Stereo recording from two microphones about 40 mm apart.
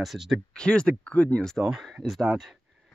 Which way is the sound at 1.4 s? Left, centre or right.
Centre.